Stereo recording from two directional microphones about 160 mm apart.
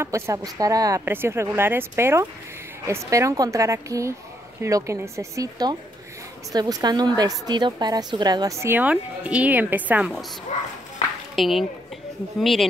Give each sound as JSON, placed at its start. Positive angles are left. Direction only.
{"t": 0.0, "sound": "a woman's voice", "side_deg": -20}
{"t": 11.3, "sound": "speech", "side_deg": 0}